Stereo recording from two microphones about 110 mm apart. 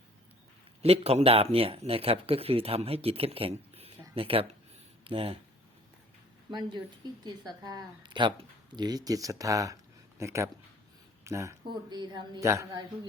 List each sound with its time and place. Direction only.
0.8 s speech: 65° right (ahead or behind)
6.5 s a woman's voice: 45° right (ahead or behind); by 11.5 s 25° right (ahead or behind)
11.7 s speech: 40° right (ahead or behind)
12.4 s speech: 25° right (ahead or behind)